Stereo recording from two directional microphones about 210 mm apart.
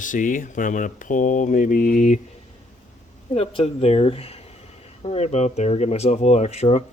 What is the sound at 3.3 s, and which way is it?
Speech, 25° left (ahead or behind).